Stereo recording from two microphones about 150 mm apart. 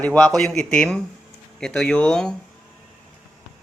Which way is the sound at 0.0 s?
10° left (ahead or behind).